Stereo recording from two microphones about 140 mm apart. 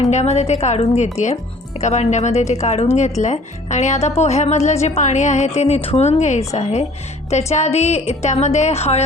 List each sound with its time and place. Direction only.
0.0 s a woman's voice: 55° left (ahead or behind)